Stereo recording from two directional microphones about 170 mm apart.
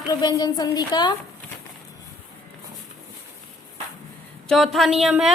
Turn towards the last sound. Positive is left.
turn(degrees=-5)  # may be behind; listen again after turning